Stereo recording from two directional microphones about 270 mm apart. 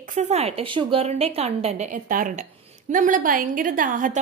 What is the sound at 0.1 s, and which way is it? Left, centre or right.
A woman's voice, right.